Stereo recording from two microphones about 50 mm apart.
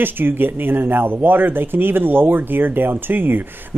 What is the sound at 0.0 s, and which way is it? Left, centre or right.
Speech, right.